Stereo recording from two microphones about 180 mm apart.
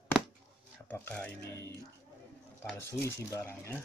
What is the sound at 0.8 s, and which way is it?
Speech, 10° left (ahead or behind).